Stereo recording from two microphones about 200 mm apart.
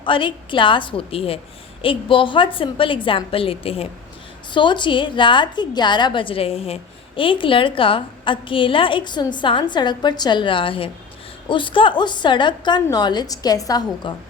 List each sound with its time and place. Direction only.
0.0 s a woman's voice: 25° left (ahead or behind)